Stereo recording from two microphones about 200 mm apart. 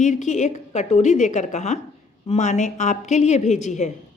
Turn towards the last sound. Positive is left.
turn(degrees=35)  # may be behind; listen again after turning